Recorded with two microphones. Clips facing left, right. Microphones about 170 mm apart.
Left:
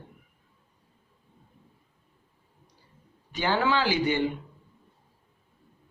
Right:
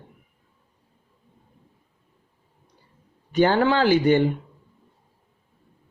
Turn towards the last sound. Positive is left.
turn(degrees=-50)  # may be behind; listen again after turning